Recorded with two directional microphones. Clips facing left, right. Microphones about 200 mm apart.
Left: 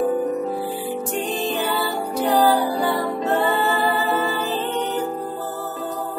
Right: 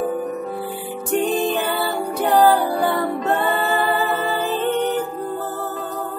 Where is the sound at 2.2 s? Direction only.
55° right (ahead or behind).